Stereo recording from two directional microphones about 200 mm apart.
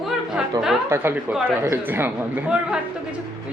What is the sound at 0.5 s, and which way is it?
A woman's voice, 20° right (ahead or behind).